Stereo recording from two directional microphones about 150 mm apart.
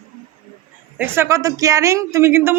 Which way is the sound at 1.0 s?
15° right (ahead or behind).